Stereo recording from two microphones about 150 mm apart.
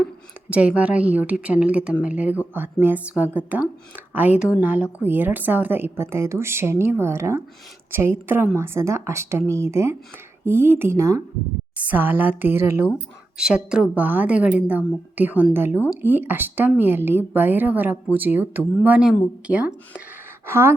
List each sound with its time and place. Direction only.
0.5 s speech: 10° right (ahead or behind)
11.8 s speech: 10° right (ahead or behind)
12.9 s speech: 5° right (ahead or behind)